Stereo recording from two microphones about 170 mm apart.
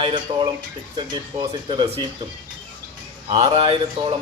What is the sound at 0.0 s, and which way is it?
Speech, 30° right (ahead or behind).